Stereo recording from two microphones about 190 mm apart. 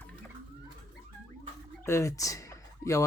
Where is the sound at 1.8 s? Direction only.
15° left (ahead or behind).